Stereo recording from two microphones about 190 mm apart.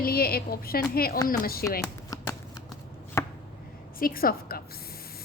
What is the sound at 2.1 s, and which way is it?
Shuffling cards, 15° left (ahead or behind).